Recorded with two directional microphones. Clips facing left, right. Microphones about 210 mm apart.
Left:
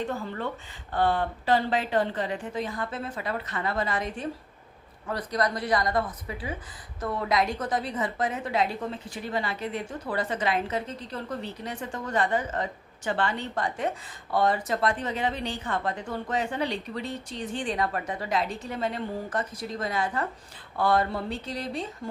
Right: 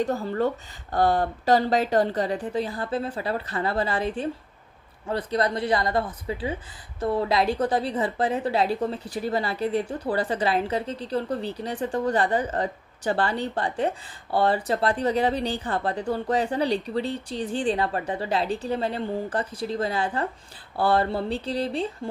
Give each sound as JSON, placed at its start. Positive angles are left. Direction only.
{"t": 0.0, "sound": "a woman's voice", "side_deg": -40}